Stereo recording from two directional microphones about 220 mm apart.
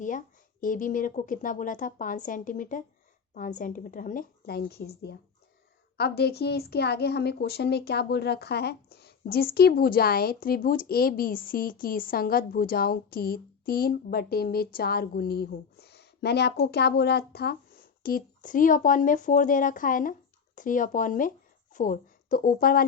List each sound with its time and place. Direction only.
0.0 s a woman's voice: 35° left (ahead or behind)